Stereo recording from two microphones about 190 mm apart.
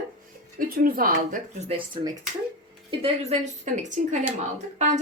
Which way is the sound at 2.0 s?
25° right (ahead or behind).